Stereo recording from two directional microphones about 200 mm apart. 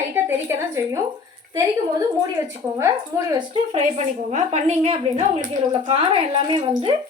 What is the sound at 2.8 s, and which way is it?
Speech, 15° right (ahead or behind).